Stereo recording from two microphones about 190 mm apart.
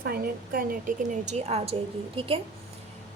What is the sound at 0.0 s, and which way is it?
A woman's voice, 55° right (ahead or behind).